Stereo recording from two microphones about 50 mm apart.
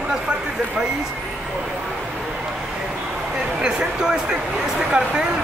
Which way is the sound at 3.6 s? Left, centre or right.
Centre.